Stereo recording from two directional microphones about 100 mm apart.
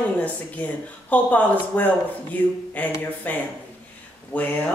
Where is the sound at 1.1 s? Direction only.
15° left (ahead or behind).